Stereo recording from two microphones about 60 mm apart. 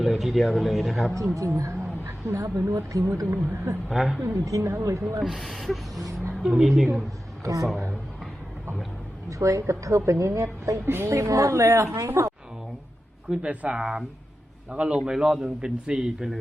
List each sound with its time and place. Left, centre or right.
0.0 s speech: centre
1.4 s a sound: right
2.2 s a woman's voice: right
3.8 s speech: centre
4.2 s a woman's voice: right
5.2 s a woman's voice: centre
9.4 s a woman's voice: right
13.3 s a man's voice: centre